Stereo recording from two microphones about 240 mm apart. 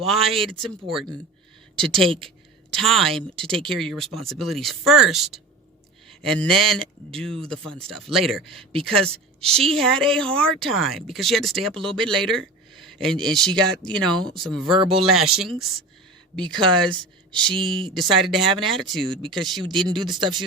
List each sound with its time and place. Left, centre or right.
0.0 s speech: centre
2.6 s speech: centre
9.0 s a woman's voice: right
9.6 s speech: centre
16.8 s a woman's voice: centre
17.5 s speech: centre
17.7 s speech: centre
19.5 s speech: centre